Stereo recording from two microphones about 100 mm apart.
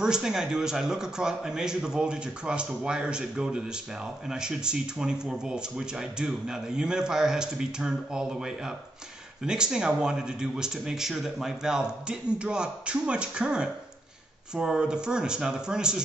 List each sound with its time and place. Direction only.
0.0 s a man's voice: 5° right (ahead or behind)